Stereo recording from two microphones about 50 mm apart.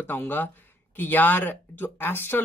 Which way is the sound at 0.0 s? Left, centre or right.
Left.